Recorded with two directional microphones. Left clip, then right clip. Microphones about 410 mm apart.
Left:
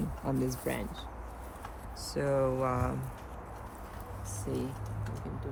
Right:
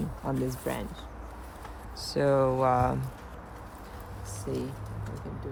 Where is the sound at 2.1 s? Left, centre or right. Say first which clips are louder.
Right 5 dB; right.